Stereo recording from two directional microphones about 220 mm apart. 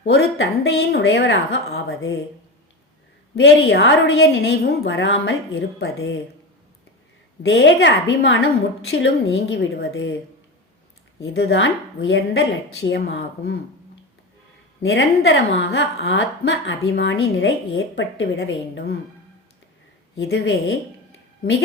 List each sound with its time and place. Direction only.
0.0 s a woman's voice: 55° left (ahead or behind)
3.3 s a woman's voice: 55° left (ahead or behind)
7.4 s a woman's voice: 55° left (ahead or behind)
11.2 s a woman's voice: 55° left (ahead or behind)
14.8 s a woman's voice: 55° left (ahead or behind)
20.1 s a woman's voice: 55° left (ahead or behind)